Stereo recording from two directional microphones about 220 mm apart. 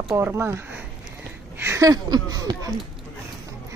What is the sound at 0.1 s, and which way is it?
Speech, 10° right (ahead or behind).